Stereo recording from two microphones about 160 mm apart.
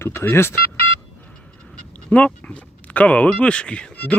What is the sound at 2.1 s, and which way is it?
Speech, 10° left (ahead or behind).